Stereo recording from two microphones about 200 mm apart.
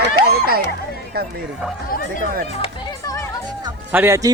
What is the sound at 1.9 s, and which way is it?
Speech, 45° left (ahead or behind).